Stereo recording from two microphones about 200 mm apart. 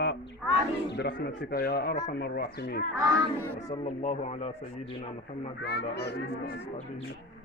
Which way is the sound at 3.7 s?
35° left (ahead or behind).